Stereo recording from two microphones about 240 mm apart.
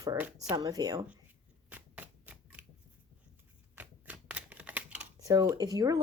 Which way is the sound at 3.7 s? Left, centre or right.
Centre.